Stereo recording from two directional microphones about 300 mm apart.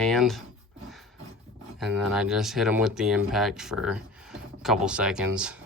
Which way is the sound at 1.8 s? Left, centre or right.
Centre.